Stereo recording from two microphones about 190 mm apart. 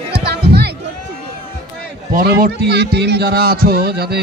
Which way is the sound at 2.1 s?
55° right (ahead or behind).